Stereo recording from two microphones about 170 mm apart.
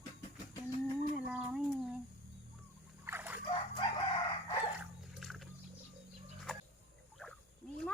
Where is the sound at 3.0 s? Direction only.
10° right (ahead or behind).